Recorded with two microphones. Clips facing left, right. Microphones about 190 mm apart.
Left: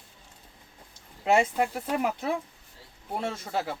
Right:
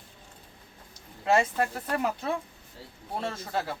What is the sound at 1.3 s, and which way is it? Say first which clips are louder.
Speech: left 1 dB; 15° left (ahead or behind).